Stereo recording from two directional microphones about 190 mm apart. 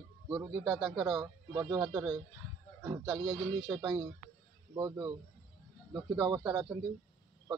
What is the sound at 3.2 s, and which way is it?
A man's voice, 25° right (ahead or behind).